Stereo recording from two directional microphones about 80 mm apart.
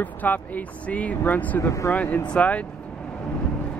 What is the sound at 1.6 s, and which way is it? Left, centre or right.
Speech, left.